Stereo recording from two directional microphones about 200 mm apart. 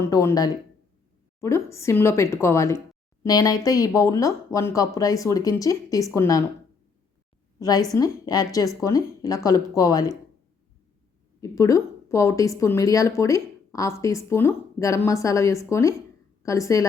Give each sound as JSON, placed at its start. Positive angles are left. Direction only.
{"t": 0.0, "sound": "speech", "side_deg": 15}
{"t": 7.6, "sound": "a woman's voice", "side_deg": 20}
{"t": 11.3, "sound": "a woman's voice", "side_deg": 15}